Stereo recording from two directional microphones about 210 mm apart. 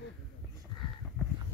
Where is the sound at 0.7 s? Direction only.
20° left (ahead or behind).